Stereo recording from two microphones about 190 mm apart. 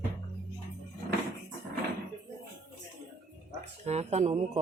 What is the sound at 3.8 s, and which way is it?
Speech, 35° right (ahead or behind).